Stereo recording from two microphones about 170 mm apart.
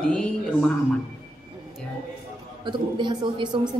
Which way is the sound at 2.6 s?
25° right (ahead or behind).